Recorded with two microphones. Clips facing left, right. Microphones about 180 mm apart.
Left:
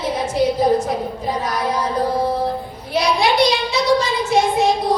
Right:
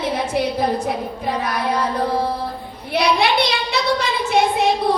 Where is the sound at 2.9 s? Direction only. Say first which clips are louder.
Left 1 dB; 60° right (ahead or behind).